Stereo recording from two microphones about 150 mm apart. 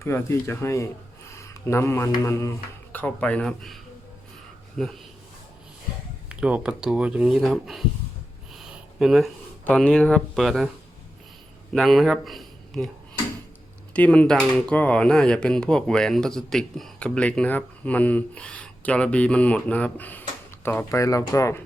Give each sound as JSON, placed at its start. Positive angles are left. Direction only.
{"t": 0.0, "sound": "speech", "side_deg": 20}
{"t": 4.8, "sound": "speech", "side_deg": 0}
{"t": 6.2, "sound": "speech", "side_deg": -5}
{"t": 8.5, "sound": "a sound", "side_deg": -5}
{"t": 9.6, "sound": "speech", "side_deg": 5}
{"t": 11.7, "sound": "speech", "side_deg": 0}
{"t": 13.9, "sound": "speech", "side_deg": 10}